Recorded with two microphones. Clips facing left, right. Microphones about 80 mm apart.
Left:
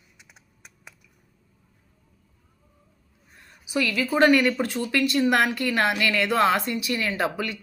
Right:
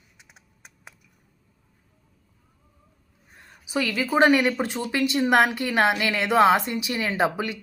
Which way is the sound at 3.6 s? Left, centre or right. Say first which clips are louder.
Even; right.